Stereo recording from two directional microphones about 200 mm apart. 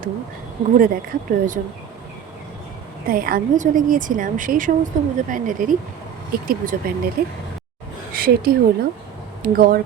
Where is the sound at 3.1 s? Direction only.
45° right (ahead or behind).